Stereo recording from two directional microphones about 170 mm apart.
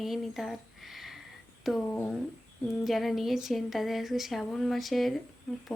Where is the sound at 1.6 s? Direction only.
5° left (ahead or behind).